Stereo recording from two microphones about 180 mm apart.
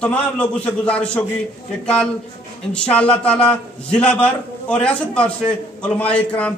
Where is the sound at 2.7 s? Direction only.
5° left (ahead or behind).